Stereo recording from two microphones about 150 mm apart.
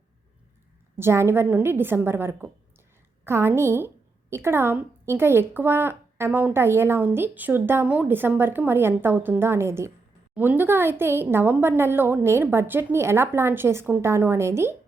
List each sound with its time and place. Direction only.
0.9 s a woman's voice: 15° right (ahead or behind)